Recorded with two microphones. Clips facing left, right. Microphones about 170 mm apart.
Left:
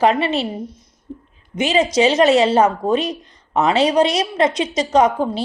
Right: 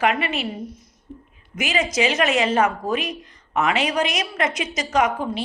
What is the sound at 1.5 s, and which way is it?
Speech, 35° left (ahead or behind).